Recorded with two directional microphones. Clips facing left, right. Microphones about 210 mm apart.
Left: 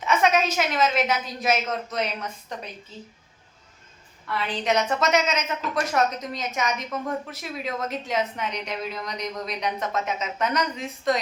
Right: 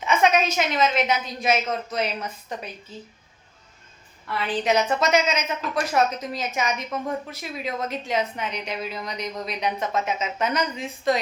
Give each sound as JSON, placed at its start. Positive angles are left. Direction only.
{"t": 0.0, "sound": "a woman's voice", "side_deg": 0}
{"t": 4.5, "sound": "a woman's voice", "side_deg": -5}